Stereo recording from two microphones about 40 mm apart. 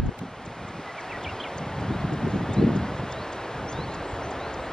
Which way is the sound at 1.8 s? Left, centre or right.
Centre.